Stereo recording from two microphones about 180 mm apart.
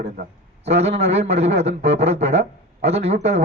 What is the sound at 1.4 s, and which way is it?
Speech, 75° right (ahead or behind).